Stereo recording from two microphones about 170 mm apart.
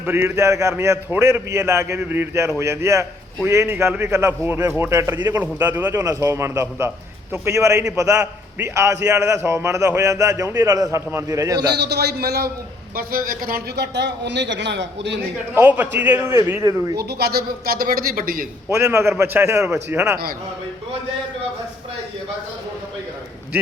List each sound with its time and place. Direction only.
0.0 s a man's voice: 15° right (ahead or behind)
5.3 s a man's voice: 10° right (ahead or behind)
11.6 s a man's voice: 75° right (ahead or behind)
13.0 s a man's voice: 60° right (ahead or behind); by 15.2 s 90° right
15.5 s a man's voice: 10° right (ahead or behind)
17.0 s speech: 70° right (ahead or behind)
18.7 s a man's voice: 15° right (ahead or behind)